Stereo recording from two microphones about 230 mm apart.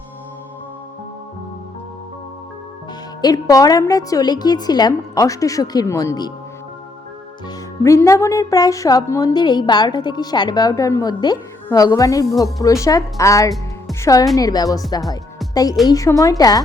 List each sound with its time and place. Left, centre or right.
3.2 s a woman's voice: centre
7.8 s a woman's voice: centre
15.9 s a woman's voice: centre